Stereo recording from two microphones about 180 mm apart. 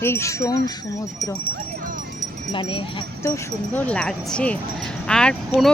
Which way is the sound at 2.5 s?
30° left (ahead or behind).